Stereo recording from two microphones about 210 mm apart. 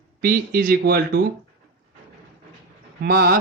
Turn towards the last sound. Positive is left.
turn(degrees=-45)  # may be behind; listen again after turning